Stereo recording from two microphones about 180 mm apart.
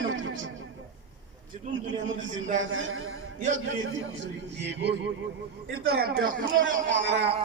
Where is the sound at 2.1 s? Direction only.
90° right.